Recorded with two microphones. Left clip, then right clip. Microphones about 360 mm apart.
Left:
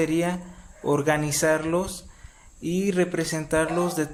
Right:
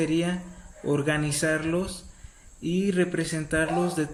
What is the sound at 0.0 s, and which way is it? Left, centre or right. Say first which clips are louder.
Speech: left 2 dB; centre.